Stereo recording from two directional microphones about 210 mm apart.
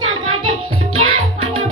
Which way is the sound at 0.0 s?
75° right (ahead or behind).